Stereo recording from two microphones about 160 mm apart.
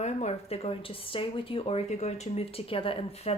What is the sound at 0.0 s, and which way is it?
A woman's voice, 45° left (ahead or behind).